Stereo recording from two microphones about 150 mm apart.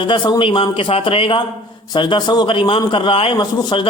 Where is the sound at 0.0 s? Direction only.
30° left (ahead or behind).